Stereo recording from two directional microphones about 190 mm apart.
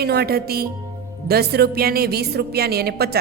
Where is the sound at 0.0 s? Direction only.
55° right (ahead or behind).